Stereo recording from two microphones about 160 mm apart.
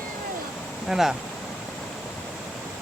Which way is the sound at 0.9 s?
5° right (ahead or behind).